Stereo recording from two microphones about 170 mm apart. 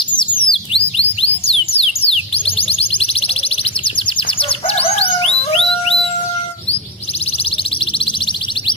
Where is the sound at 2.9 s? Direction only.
35° left (ahead or behind).